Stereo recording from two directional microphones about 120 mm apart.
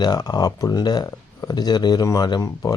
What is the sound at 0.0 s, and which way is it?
Speech, 35° left (ahead or behind).